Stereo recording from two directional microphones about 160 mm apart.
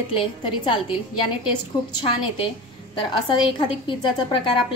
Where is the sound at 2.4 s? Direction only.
30° left (ahead or behind).